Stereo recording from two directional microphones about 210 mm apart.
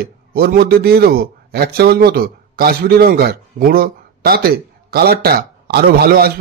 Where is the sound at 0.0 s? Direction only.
45° right (ahead or behind).